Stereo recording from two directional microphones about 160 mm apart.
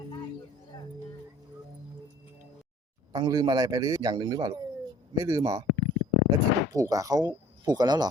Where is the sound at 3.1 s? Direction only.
25° right (ahead or behind).